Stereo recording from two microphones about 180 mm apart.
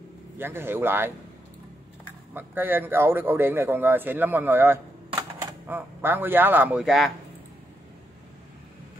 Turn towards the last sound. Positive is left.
turn(degrees=0)  # may be behind; listen again after turning